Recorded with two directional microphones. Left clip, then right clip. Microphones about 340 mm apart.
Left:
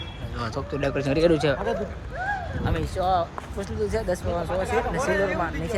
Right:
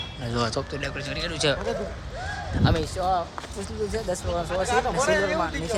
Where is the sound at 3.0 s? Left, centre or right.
Centre.